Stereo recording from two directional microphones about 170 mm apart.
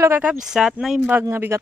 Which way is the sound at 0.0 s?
15° right (ahead or behind).